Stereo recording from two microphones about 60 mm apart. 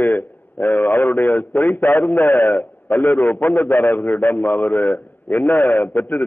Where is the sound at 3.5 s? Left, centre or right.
Left.